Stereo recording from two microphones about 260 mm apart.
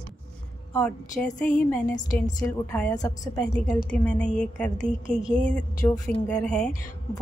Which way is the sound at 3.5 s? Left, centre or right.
Centre.